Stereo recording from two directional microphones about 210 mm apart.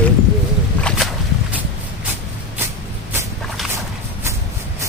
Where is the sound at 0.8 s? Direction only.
5° left (ahead or behind).